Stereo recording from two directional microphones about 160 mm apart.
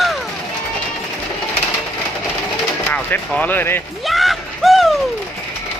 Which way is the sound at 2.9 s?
10° left (ahead or behind).